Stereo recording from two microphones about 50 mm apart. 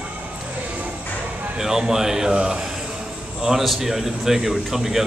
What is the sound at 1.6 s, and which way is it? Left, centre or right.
A man's voice, centre.